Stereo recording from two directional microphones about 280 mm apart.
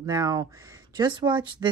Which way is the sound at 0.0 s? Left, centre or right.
Centre.